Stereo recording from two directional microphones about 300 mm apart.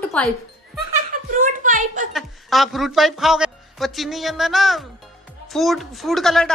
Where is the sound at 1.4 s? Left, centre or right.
Right.